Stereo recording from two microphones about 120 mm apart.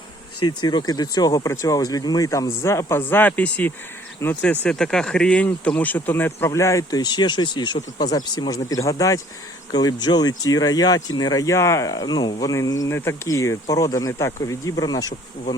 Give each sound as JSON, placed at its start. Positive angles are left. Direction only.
{"t": 0.4, "sound": "speech", "side_deg": 35}